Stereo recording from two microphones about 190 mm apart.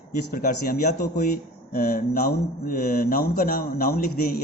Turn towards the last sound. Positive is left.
turn(degrees=55)  # may be behind; listen again after turning